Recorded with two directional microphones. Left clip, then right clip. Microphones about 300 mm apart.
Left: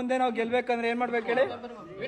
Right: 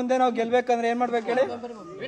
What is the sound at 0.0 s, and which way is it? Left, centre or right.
A man's voice, right.